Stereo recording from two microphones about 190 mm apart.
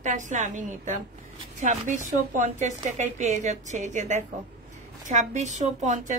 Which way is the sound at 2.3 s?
40° right (ahead or behind).